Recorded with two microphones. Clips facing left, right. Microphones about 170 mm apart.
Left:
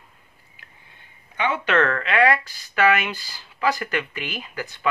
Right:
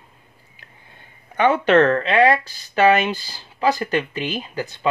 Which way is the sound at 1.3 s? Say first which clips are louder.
Right 7 dB; 45° right (ahead or behind).